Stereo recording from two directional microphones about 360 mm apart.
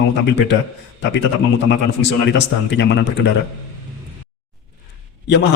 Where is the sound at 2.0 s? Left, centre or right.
Left.